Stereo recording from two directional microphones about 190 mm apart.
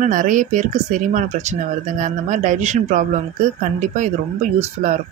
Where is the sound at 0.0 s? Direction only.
45° right (ahead or behind).